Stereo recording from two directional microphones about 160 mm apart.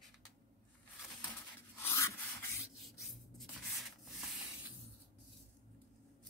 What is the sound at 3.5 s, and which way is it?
Sanding, centre (ahead or behind).